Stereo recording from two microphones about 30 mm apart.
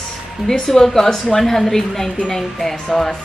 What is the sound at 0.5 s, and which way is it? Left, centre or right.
A woman's voice, centre.